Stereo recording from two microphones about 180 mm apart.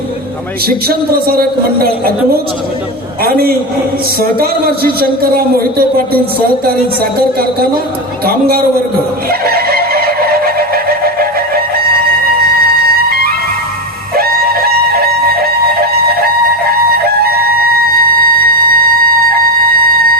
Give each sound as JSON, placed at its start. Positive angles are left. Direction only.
{"t": 0.9, "sound": "a man's voice", "side_deg": -55}
{"t": 7.0, "sound": "a man's voice", "side_deg": -55}
{"t": 9.4, "sound": "chicken", "side_deg": -55}
{"t": 13.1, "sound": "music", "side_deg": -55}
{"t": 14.2, "sound": "a sound", "side_deg": -55}
{"t": 18.3, "sound": "music", "side_deg": -55}